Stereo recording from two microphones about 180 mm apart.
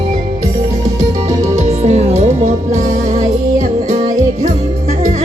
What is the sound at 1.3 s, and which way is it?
Music, 20° right (ahead or behind).